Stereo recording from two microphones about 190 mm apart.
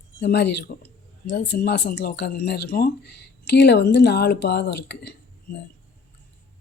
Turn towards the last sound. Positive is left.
turn(degrees=65)  # may be behind; listen again after turning